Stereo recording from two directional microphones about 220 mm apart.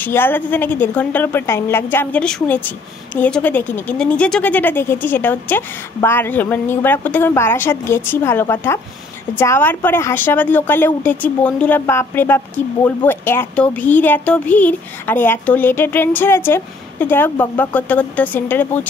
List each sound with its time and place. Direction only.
0.0 s speech: 10° left (ahead or behind)